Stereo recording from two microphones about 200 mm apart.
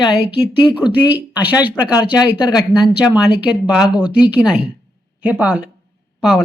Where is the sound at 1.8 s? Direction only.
5° right (ahead or behind).